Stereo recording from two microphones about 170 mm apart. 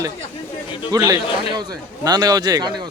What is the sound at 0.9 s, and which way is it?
Speech, 20° right (ahead or behind).